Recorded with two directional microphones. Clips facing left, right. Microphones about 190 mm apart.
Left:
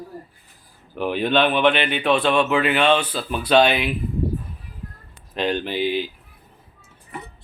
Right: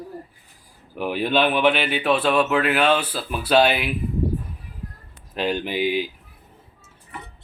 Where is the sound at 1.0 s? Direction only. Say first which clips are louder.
Left 1 dB; 5° right (ahead or behind).